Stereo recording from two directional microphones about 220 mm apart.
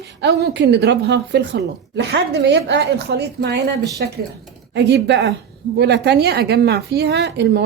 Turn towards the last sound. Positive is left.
turn(degrees=-50)  # may be behind; listen again after turning